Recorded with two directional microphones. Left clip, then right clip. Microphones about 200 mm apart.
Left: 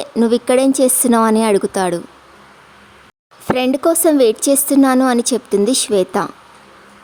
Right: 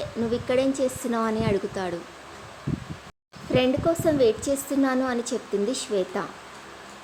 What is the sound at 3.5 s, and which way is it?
A woman's voice, 60° left (ahead or behind).